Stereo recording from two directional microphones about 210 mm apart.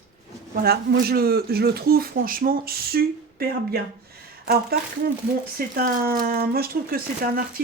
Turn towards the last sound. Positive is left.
turn(degrees=-45)  # may be behind; listen again after turning